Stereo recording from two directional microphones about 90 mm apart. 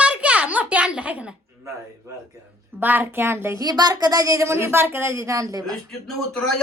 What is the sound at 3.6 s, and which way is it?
Speech, 45° right (ahead or behind).